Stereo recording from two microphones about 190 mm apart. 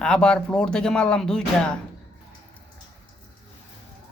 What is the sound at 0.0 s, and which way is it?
Speech, 5° left (ahead or behind).